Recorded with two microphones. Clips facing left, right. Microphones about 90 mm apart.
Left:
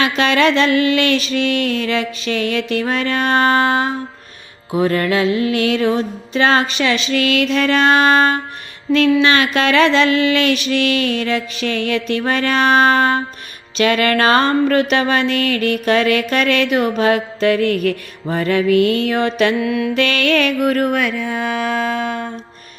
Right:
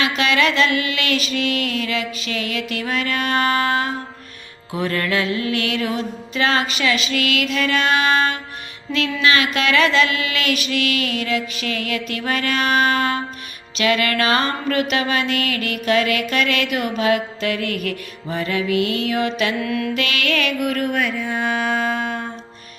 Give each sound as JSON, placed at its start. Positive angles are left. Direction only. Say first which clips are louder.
{"t": 0.0, "sound": "music", "louder": "left 4 dB", "side_deg": 40}
{"t": 19.6, "sound": "mantra", "louder": "left 4 dB", "side_deg": 25}
{"t": 19.9, "sound": "music", "louder": "left 6 dB", "side_deg": 40}